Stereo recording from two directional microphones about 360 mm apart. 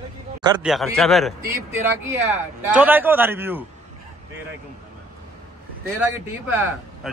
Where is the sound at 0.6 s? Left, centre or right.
Centre.